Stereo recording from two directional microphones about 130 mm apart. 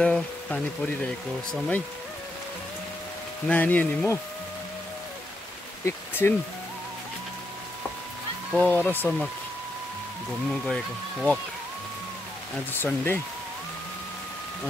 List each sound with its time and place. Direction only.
0.0 s speech: 5° left (ahead or behind)
3.4 s speech: 10° left (ahead or behind)
5.9 s speech: 15° left (ahead or behind)
8.5 s speech: 10° left (ahead or behind)
10.5 s speech: 5° left (ahead or behind)
12.8 s speech: 15° left (ahead or behind)